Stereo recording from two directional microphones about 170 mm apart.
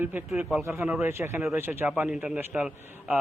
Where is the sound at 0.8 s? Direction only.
5° right (ahead or behind).